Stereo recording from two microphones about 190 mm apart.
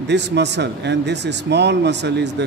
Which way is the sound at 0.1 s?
65° right (ahead or behind).